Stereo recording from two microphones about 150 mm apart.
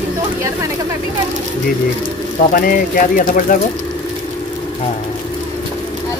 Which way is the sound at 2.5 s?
70° left (ahead or behind).